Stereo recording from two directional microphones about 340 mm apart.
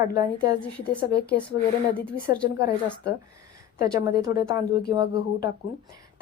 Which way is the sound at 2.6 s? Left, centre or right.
Left.